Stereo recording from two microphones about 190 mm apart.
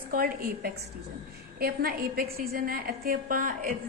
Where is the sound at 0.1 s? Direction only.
50° right (ahead or behind).